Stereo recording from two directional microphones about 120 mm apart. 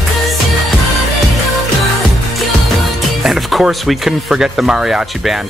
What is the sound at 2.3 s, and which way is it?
Speech, centre (ahead or behind).